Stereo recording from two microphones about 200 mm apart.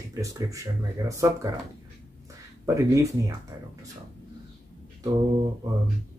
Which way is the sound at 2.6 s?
15° right (ahead or behind).